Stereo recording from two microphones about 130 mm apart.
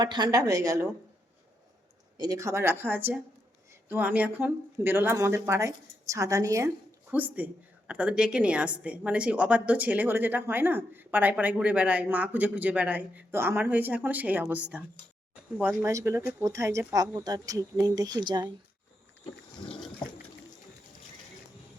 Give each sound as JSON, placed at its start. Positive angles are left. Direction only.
{"t": 0.0, "sound": "speech", "side_deg": -35}
{"t": 2.1, "sound": "speech", "side_deg": -30}
{"t": 7.1, "sound": "a woman's voice", "side_deg": -10}
{"t": 19.6, "sound": "boat", "side_deg": 10}